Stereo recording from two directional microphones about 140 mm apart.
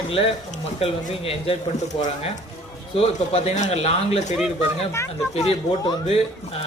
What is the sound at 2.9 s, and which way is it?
Speech, 45° left (ahead or behind).